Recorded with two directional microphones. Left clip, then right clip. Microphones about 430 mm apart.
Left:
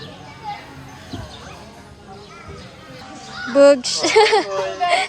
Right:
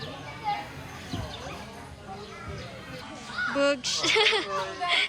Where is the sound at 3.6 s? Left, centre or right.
Centre.